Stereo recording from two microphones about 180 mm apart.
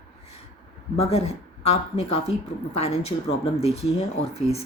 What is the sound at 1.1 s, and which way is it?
A woman's voice, 35° left (ahead or behind).